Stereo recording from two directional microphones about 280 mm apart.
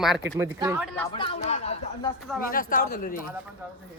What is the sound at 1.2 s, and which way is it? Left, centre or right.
Speech, left.